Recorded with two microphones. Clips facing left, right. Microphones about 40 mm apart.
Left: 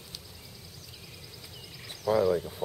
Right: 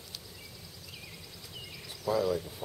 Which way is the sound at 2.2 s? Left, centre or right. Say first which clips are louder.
Left 4 dB; left.